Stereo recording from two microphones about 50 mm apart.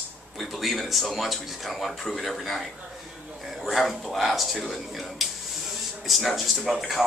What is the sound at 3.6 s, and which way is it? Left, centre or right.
Speech, centre.